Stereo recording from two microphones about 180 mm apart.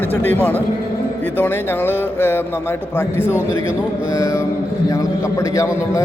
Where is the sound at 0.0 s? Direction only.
10° left (ahead or behind).